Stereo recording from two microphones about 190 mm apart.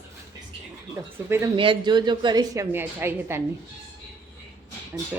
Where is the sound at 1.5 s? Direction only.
25° right (ahead or behind).